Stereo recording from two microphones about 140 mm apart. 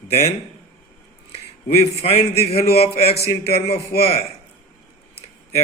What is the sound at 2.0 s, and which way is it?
Speech, 45° left (ahead or behind).